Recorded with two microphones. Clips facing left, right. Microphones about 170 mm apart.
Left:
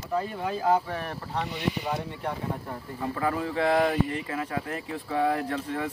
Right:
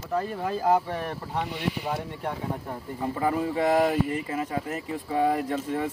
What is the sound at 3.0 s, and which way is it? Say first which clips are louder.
Speech: right 2 dB; 15° right (ahead or behind).